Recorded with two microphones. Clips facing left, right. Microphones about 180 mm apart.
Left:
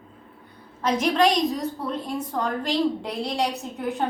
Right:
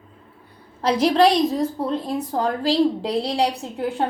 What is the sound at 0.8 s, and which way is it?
A woman's voice, 35° right (ahead or behind).